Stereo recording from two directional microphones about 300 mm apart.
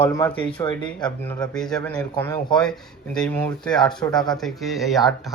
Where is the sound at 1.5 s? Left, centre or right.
Centre.